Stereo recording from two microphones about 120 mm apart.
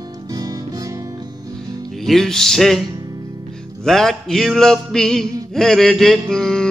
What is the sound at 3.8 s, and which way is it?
Music, 5° left (ahead or behind).